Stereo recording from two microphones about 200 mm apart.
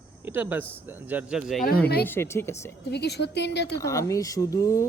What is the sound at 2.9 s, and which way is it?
Speech, 55° left (ahead or behind).